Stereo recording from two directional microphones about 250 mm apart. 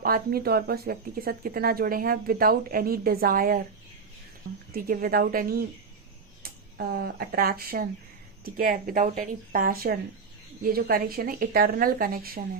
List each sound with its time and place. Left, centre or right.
0.0 s speech: right
4.7 s speech: right